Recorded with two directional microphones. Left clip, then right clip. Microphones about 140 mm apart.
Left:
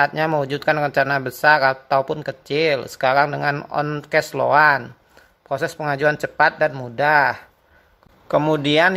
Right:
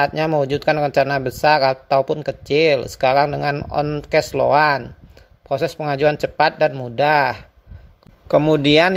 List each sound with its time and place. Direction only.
0.0 s a man's voice: 35° right (ahead or behind)